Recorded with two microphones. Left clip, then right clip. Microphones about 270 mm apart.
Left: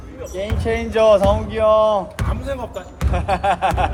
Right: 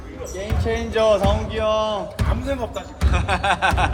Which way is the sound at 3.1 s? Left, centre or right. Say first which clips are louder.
Left 2 dB; centre.